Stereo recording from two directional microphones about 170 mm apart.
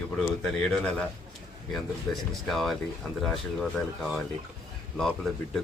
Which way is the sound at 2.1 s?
5° left (ahead or behind).